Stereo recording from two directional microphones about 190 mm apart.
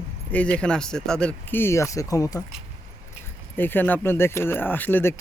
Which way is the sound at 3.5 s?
10° left (ahead or behind).